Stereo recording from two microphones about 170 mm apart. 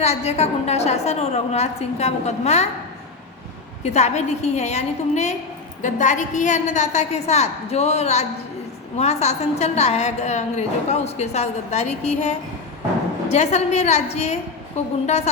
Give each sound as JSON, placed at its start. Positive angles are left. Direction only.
{"t": 0.0, "sound": "a woman's voice", "side_deg": 40}
{"t": 3.8, "sound": "a woman's voice", "side_deg": 40}